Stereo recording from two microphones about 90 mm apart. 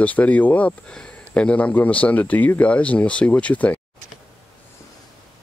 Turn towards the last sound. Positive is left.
turn(degrees=15)  # may be behind; listen again after turning